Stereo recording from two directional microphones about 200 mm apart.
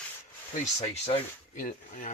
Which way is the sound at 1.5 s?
40° left (ahead or behind).